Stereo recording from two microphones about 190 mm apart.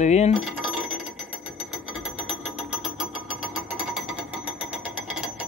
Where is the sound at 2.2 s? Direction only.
5° right (ahead or behind).